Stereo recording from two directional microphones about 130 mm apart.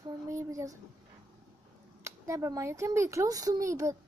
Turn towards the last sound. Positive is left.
turn(degrees=-25)  # may be behind; listen again after turning